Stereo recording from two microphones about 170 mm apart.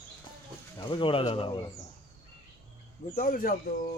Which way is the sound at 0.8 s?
30° left (ahead or behind).